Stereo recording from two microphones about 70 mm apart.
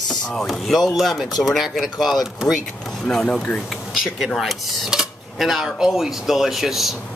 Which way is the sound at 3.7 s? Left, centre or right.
Centre.